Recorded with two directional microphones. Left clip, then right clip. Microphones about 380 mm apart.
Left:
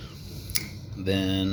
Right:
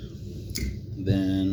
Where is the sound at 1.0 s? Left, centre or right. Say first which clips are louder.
Even; left.